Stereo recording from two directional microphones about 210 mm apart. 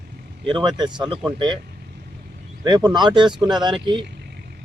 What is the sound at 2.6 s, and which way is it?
Speech, 20° right (ahead or behind).